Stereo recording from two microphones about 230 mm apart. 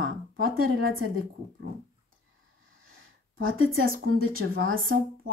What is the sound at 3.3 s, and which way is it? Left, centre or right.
Speech, right.